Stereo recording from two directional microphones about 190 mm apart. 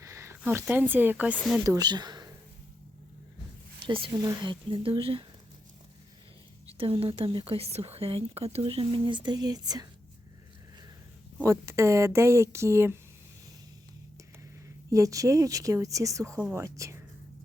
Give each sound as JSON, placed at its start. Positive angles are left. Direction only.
{"t": 0.0, "sound": "speech", "side_deg": -15}
{"t": 1.6, "sound": "a woman's voice", "side_deg": -20}
{"t": 3.8, "sound": "speech", "side_deg": -25}
{"t": 6.7, "sound": "speech", "side_deg": -30}
{"t": 11.4, "sound": "speech", "side_deg": -15}
{"t": 14.8, "sound": "speech", "side_deg": -15}